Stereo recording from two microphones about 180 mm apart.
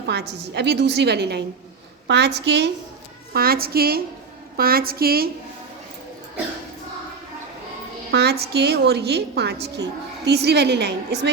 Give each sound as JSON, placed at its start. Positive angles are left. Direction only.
{"t": 0.1, "sound": "a woman's voice", "side_deg": -65}
{"t": 3.3, "sound": "a woman's voice", "side_deg": -55}
{"t": 8.1, "sound": "a woman's voice", "side_deg": -65}